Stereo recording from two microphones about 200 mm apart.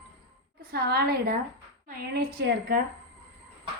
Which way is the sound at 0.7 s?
50° right (ahead or behind).